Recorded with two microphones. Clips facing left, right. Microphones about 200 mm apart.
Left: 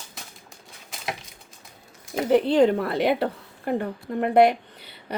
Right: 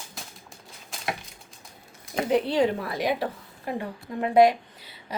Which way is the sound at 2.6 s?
60° left (ahead or behind).